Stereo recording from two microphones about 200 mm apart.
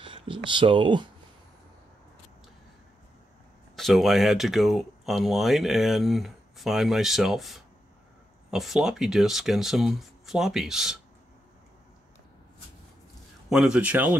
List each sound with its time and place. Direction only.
0.0 s speech: 25° right (ahead or behind)
3.7 s speech: centre (ahead or behind)
13.5 s speech: 5° right (ahead or behind)